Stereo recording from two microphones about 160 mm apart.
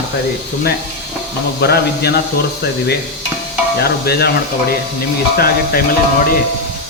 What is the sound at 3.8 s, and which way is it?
Speech, 80° left.